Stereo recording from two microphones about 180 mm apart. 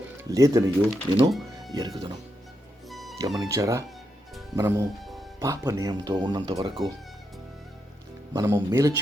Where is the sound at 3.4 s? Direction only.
15° right (ahead or behind).